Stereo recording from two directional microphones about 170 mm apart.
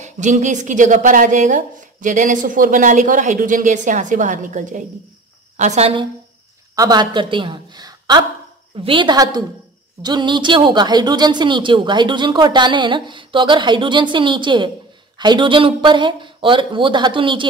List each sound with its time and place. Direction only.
0.0 s a woman's voice: 45° right (ahead or behind)
6.7 s a woman's voice: 20° right (ahead or behind)